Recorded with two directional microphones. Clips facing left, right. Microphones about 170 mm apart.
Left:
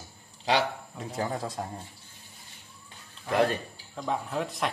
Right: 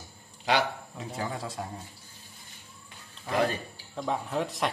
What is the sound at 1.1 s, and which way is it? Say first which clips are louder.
Speech: left 3 dB; 45° left (ahead or behind).